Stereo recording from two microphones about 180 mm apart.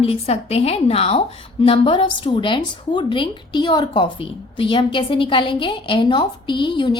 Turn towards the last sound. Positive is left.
turn(degrees=25)  # may be behind; listen again after turning